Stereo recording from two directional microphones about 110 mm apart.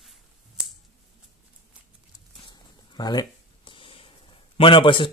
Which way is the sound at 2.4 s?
45° left (ahead or behind).